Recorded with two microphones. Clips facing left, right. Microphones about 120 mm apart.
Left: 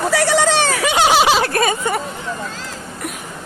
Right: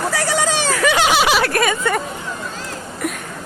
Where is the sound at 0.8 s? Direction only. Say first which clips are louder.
Right 1 dB; 20° left (ahead or behind).